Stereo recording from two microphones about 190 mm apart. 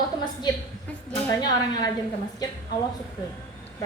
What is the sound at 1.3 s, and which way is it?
Speech, 20° left (ahead or behind).